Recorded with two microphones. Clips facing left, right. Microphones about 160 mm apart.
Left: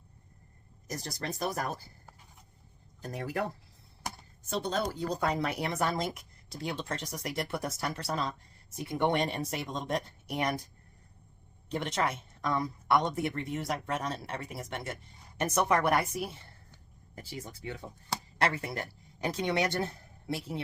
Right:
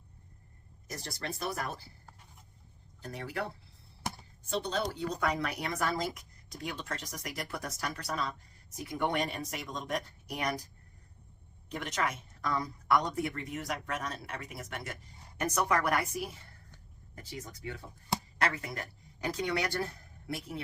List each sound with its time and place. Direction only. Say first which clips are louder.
0.9 s speech: left 3 dB; 40° left (ahead or behind)
3.0 s speech: left 3 dB; 45° left (ahead or behind)
4.4 s speech: left 1 dB; 45° left (ahead or behind); by 10.6 s 25° left (ahead or behind)
11.7 s speech: left 3 dB; 30° left (ahead or behind)